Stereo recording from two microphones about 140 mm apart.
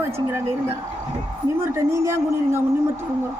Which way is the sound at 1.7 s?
20° right (ahead or behind).